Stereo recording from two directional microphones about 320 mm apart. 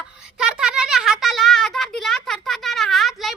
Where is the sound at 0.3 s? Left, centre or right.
Centre.